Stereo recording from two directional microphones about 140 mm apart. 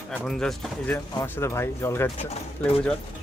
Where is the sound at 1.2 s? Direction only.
15° left (ahead or behind).